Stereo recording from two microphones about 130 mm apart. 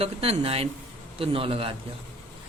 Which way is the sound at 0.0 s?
50° right (ahead or behind).